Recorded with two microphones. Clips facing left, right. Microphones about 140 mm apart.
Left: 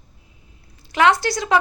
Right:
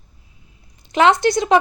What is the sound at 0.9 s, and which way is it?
Speech, 20° right (ahead or behind).